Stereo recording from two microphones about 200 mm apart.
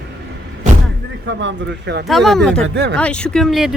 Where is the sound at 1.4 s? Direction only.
60° right (ahead or behind).